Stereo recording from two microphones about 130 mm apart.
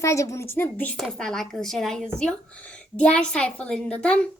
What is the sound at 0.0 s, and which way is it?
Speech, 25° left (ahead or behind).